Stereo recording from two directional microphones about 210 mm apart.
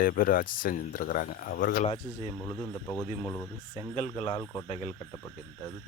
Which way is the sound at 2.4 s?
10° left (ahead or behind).